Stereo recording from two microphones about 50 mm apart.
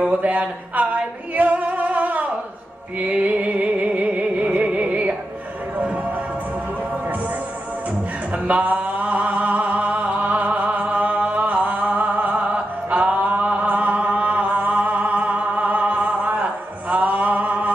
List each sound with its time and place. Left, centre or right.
0.1 s singing: right
3.0 s music: right
8.5 s music: right
16.9 s a sound: right